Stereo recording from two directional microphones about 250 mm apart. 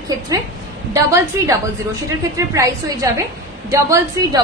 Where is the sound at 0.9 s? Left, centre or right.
Centre.